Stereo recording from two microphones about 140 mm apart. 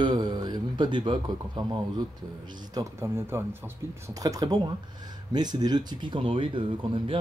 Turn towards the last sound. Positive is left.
turn(degrees=-35)  # may be behind; listen again after turning